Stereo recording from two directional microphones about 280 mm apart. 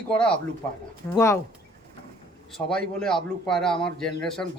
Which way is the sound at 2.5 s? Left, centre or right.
Centre.